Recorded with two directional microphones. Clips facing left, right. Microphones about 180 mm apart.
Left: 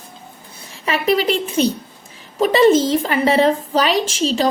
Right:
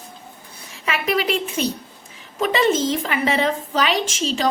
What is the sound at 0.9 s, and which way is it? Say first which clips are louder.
A woman's voice: left 4 dB; 30° left (ahead or behind).